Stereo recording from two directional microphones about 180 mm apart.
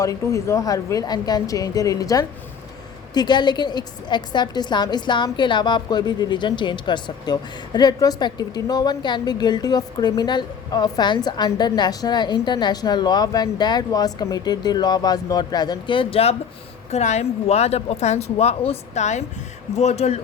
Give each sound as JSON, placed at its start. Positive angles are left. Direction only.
{"t": 0.0, "sound": "a woman's voice", "side_deg": 15}